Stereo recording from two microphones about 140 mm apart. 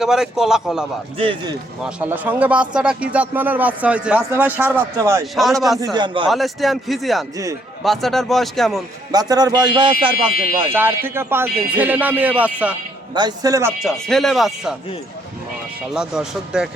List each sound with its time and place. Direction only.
0.0 s speech: 5° right (ahead or behind)
1.2 s speech: 40° right (ahead or behind)
1.8 s a man's voice: 10° right (ahead or behind)
5.2 s speech: centre (ahead or behind)
5.8 s speech: 30° right (ahead or behind)
6.3 s speech: centre (ahead or behind)
9.1 s speech: 25° right (ahead or behind)
10.6 s a man's voice: 15° right (ahead or behind)
13.1 s speech: 30° right (ahead or behind)
13.7 s speech: centre (ahead or behind)
15.9 s speech: 5° right (ahead or behind)